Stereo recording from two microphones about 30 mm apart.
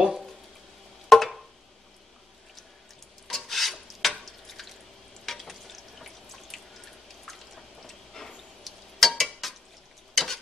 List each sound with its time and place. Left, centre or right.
1.0 s a sound: centre
3.3 s stir: centre
7.2 s drip: centre
8.2 s a sound: centre
8.6 s stir: centre
10.1 s tick-tock: centre